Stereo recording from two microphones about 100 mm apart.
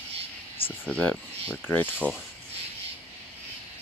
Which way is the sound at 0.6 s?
65° left (ahead or behind).